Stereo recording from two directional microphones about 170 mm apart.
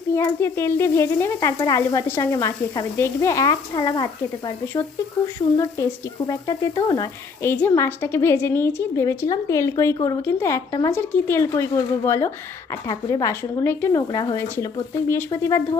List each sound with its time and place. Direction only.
0.2 s a woman's voice: 15° left (ahead or behind)
7.4 s a woman's voice: 10° left (ahead or behind)